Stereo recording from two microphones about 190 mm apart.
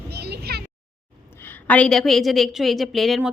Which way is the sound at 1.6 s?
5° left (ahead or behind).